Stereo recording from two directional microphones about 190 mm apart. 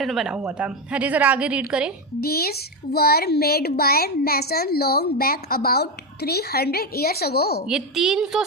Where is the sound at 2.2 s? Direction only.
55° left (ahead or behind).